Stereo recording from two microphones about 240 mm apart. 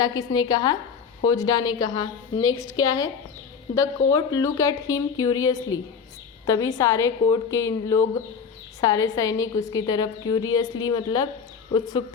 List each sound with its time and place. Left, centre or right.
0.0 s a woman's voice: centre